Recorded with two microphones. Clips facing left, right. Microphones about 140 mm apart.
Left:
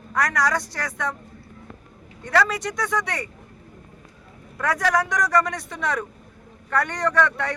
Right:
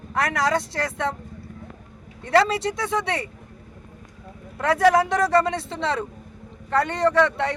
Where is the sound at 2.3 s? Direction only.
25° right (ahead or behind).